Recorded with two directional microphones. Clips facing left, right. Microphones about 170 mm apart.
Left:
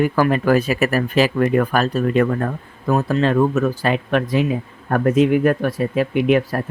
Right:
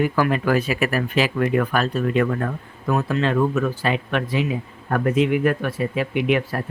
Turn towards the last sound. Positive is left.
turn(degrees=40)  # may be behind; listen again after turning